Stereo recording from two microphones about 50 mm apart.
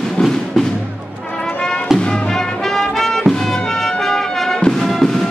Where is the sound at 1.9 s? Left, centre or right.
Centre.